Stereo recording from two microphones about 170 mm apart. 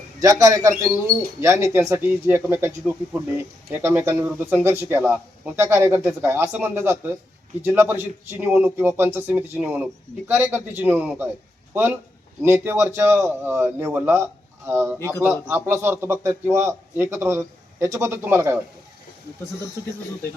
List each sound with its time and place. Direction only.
0.2 s a man's voice: 20° right (ahead or behind)